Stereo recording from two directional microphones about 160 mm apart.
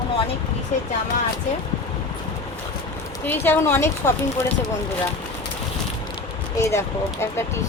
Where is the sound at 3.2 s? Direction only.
15° left (ahead or behind).